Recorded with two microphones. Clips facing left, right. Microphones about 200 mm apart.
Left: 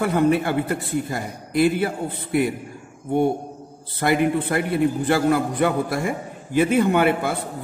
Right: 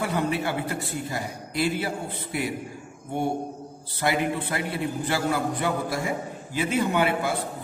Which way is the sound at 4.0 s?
50° left (ahead or behind).